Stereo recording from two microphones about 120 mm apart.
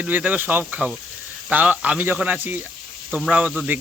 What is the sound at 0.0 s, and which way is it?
Speech, 15° right (ahead or behind).